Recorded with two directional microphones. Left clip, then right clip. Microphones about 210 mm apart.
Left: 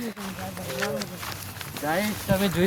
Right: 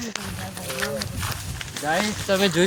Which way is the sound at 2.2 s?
50° right (ahead or behind).